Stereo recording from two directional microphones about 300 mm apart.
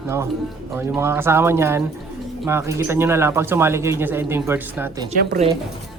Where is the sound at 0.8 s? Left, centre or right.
Centre.